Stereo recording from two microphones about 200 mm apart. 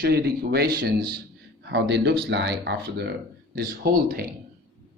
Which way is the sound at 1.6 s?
60° right (ahead or behind).